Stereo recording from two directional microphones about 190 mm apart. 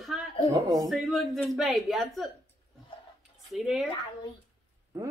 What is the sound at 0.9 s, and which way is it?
A woman's voice, centre (ahead or behind).